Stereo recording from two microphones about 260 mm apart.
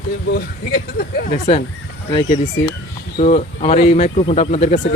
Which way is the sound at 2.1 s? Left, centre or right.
Centre.